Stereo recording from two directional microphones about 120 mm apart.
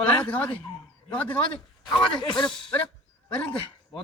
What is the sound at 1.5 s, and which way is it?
Speech, 40° left (ahead or behind).